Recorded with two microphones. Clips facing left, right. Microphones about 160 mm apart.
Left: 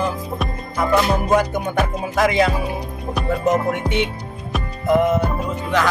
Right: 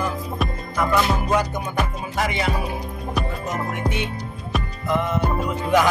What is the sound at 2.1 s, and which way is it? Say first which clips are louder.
Music: left 7 dB; 90° left.